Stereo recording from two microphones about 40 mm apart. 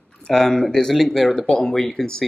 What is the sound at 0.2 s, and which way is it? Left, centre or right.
Speech, centre.